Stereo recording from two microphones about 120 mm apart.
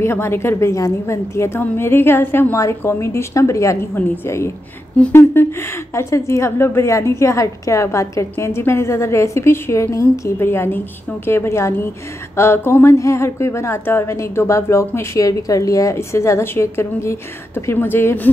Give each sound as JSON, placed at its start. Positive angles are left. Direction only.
{"t": 0.0, "sound": "a woman's voice", "side_deg": 20}